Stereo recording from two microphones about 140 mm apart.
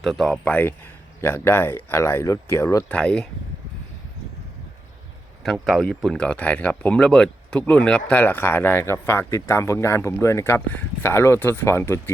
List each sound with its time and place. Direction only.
0.0 s speech: centre (ahead or behind)
0.4 s speech: 10° left (ahead or behind)
2.9 s speech: 5° left (ahead or behind)
5.4 s speech: centre (ahead or behind); by 12.1 s 15° left (ahead or behind)